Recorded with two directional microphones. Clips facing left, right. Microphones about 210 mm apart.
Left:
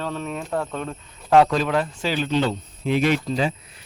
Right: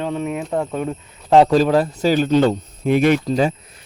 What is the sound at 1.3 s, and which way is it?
Speech, 30° right (ahead or behind).